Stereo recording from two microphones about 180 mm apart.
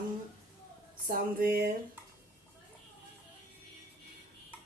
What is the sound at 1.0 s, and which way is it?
Speech, 55° right (ahead or behind).